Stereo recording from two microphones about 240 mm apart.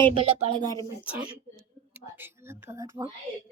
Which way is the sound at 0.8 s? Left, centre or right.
Centre.